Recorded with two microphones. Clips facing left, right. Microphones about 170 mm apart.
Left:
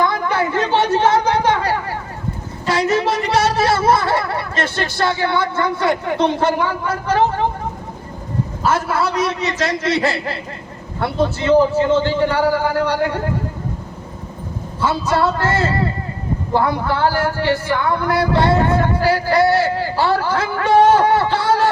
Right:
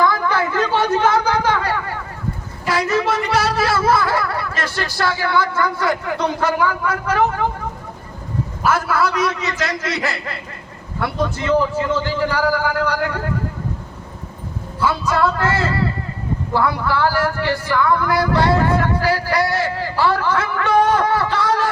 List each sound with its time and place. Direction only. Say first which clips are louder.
0.0 s a sound: even; 25° left (ahead or behind)
2.6 s speech: left 2 dB; 25° left (ahead or behind)
8.6 s speech: even; 25° left (ahead or behind)
14.8 s speech: left 1 dB; 30° left (ahead or behind)